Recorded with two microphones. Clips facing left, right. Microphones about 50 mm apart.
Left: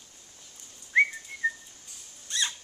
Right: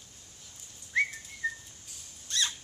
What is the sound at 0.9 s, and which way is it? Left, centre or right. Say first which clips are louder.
Whistling: left 6 dB; centre.